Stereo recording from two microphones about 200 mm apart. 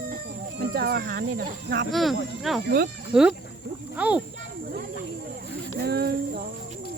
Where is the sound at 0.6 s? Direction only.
50° right (ahead or behind).